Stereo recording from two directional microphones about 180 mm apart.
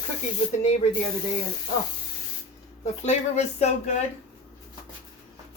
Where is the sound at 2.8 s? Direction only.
40° left (ahead or behind).